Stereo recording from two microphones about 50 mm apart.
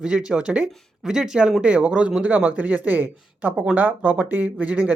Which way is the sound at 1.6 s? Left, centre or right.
Right.